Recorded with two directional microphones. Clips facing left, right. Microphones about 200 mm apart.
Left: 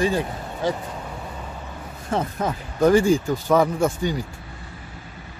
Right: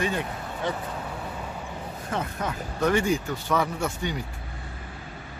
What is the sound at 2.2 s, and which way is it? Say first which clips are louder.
Speech: left 6 dB; 35° left (ahead or behind).